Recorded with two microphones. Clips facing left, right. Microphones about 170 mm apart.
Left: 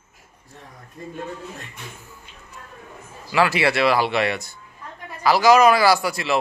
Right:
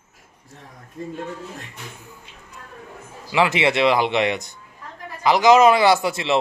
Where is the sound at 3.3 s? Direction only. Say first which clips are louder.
Right 1 dB; 20° right (ahead or behind).